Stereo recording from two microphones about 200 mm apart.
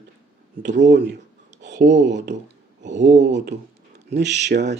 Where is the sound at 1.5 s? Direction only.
65° right (ahead or behind).